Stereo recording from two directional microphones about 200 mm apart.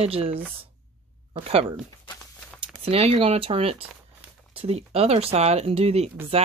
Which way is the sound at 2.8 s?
30° right (ahead or behind).